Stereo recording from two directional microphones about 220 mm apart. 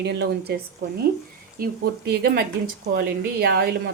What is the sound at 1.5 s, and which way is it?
Speech, 45° right (ahead or behind).